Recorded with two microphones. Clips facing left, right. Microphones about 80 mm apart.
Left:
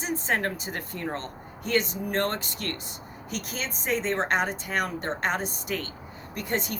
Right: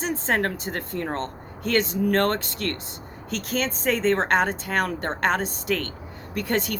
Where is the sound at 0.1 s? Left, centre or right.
Right.